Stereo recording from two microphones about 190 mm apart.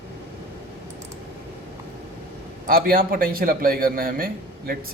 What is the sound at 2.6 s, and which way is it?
A man's voice, 50° right (ahead or behind).